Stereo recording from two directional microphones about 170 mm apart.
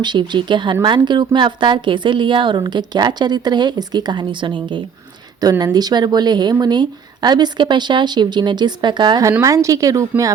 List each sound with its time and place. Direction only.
0.0 s speech: 25° right (ahead or behind)